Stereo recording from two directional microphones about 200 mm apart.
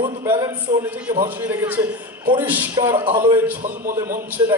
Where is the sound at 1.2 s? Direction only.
10° right (ahead or behind).